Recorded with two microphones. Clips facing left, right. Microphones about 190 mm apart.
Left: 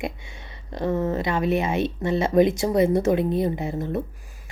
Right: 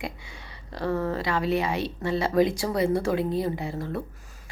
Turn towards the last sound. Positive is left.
turn(degrees=20)  # may be behind; listen again after turning